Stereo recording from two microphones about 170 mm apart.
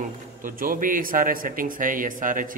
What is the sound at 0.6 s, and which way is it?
A man's voice, 55° right (ahead or behind).